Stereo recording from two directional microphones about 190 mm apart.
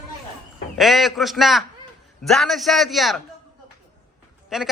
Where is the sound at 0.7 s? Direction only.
Centre (ahead or behind).